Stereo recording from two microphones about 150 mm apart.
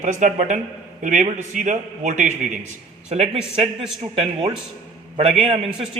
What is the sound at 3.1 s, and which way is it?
A man's voice, 40° right (ahead or behind).